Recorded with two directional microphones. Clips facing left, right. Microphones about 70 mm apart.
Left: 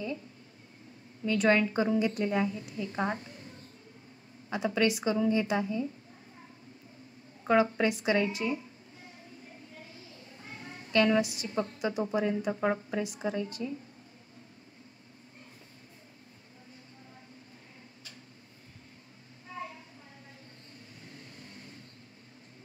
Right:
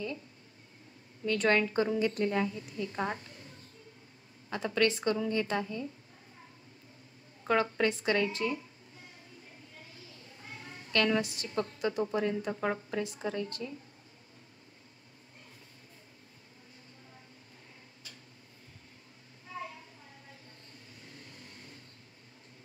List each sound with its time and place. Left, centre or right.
1.2 s a woman's voice: centre
4.5 s a woman's voice: centre
7.4 s a woman's voice: centre
10.4 s a woman's voice: left